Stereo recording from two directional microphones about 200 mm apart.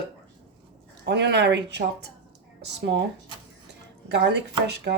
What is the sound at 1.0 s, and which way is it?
Speech, 55° right (ahead or behind).